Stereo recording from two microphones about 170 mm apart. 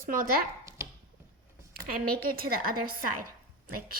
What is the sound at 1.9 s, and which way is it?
A woman's voice, 60° right (ahead or behind).